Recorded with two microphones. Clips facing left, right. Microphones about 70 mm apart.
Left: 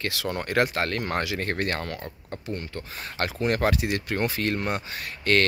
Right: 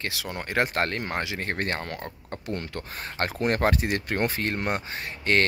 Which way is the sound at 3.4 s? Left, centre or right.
Right.